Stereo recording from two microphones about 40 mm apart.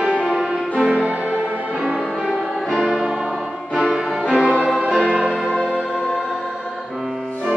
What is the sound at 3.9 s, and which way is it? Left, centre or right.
Music, centre.